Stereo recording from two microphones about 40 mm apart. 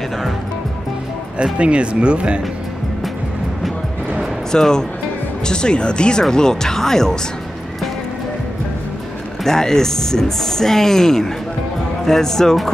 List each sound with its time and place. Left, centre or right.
1.4 s speech: right
4.5 s speech: centre
9.4 s speech: centre